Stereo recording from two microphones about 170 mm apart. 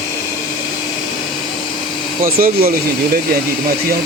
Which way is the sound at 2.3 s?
60° right (ahead or behind).